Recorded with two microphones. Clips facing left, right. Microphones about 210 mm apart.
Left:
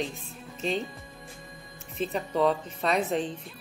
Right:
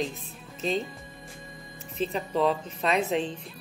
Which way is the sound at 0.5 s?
35° right (ahead or behind).